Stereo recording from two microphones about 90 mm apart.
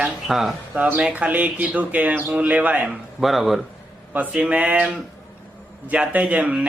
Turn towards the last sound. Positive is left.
turn(degrees=-15)  # may be behind; listen again after turning